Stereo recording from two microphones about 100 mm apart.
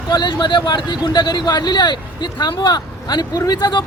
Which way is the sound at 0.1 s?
50° left (ahead or behind).